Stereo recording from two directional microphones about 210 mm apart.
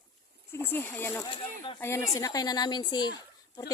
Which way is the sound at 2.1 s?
15° left (ahead or behind).